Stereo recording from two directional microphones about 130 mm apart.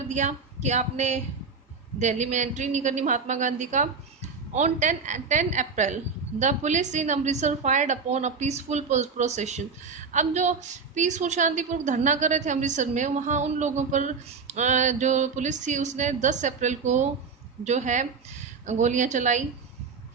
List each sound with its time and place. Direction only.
0.1 s a woman's voice: 65° right (ahead or behind)